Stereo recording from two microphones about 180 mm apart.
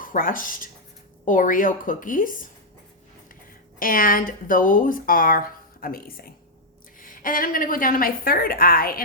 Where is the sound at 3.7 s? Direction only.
50° left (ahead or behind).